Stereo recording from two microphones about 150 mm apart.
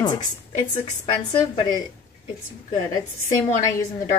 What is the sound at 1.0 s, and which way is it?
Speech, 35° left (ahead or behind).